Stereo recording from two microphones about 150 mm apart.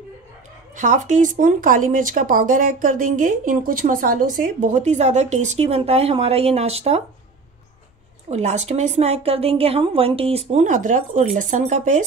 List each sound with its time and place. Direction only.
0.7 s speech: 55° right (ahead or behind)
8.3 s a woman's voice: 50° right (ahead or behind)